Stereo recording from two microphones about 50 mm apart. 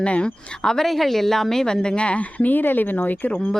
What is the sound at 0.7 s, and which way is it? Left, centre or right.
A woman's voice, centre.